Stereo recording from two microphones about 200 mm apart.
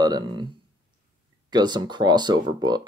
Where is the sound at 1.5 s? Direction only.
20° right (ahead or behind).